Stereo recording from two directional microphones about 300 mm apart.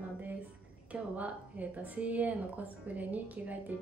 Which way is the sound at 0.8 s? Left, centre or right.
Centre.